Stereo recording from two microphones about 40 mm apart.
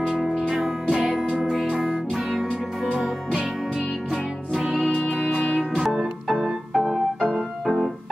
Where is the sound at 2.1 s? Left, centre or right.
Centre.